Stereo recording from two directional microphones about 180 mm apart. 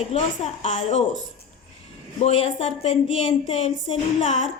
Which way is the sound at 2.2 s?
35° left (ahead or behind).